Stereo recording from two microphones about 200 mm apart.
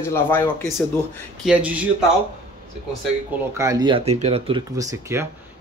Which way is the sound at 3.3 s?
15° right (ahead or behind).